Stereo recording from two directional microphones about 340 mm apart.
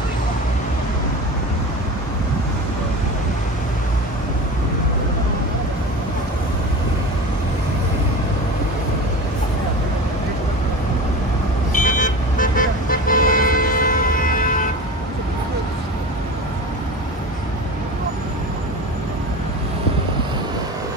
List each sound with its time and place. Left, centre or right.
11.7 s vehicle: left